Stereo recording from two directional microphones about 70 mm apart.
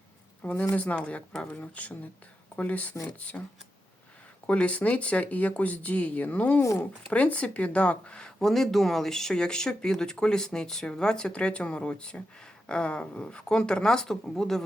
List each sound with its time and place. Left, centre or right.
0.4 s speech: left
4.4 s speech: centre